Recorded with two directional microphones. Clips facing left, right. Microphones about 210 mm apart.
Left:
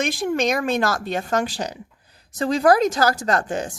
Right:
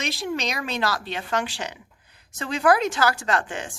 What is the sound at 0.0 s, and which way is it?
A woman's voice, 50° left (ahead or behind).